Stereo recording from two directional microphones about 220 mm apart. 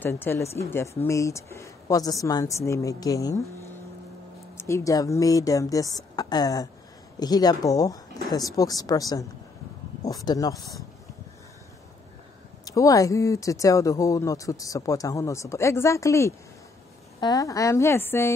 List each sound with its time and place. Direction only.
0.0 s speech: 10° left (ahead or behind)
4.6 s speech: 10° left (ahead or behind)
12.6 s speech: 15° left (ahead or behind)